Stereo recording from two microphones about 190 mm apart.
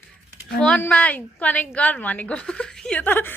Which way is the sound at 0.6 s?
5° left (ahead or behind).